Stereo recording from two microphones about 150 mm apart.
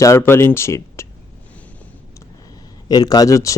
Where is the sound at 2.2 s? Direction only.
25° left (ahead or behind).